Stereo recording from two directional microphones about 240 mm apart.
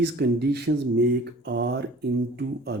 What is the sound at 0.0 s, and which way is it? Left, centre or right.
Speech, right.